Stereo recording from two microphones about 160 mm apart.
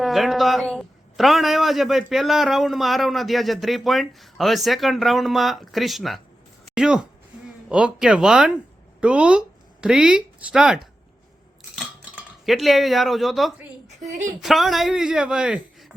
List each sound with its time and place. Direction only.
0.0 s a man's voice: centre (ahead or behind)
14.1 s speech: 50° right (ahead or behind)
14.4 s a man's voice: centre (ahead or behind)